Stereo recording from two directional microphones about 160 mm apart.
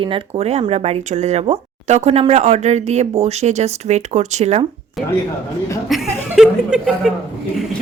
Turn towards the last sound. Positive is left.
turn(degrees=-5)  # may be behind; listen again after turning